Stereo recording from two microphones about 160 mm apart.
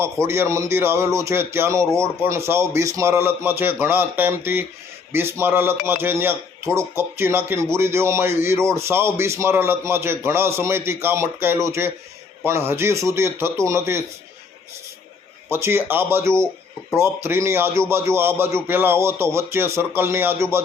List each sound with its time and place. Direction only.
0.0 s a man's voice: 15° right (ahead or behind)
15.4 s a man's voice: 15° right (ahead or behind)